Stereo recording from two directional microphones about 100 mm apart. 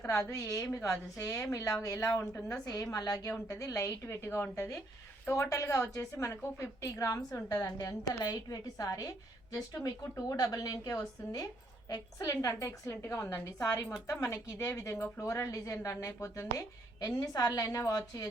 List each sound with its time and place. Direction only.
0.1 s a woman's voice: 30° left (ahead or behind)